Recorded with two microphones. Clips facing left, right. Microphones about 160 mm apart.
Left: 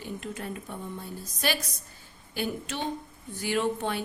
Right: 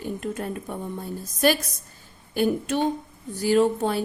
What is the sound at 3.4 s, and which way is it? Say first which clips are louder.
Speech: right 8 dB; 35° right (ahead or behind).